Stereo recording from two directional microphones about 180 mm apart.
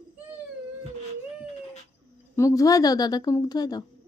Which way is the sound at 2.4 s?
20° left (ahead or behind).